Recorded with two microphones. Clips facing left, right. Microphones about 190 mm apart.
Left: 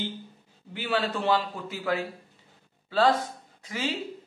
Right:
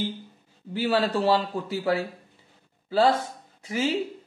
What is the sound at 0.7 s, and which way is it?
A man's voice, 35° right (ahead or behind).